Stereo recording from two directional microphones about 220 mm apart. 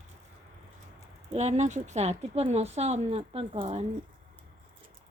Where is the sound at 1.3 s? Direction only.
30° right (ahead or behind).